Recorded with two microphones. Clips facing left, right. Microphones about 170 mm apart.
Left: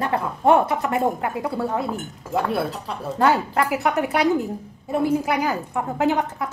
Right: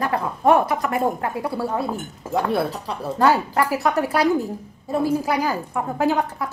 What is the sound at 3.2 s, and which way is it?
A woman's voice, 20° left (ahead or behind).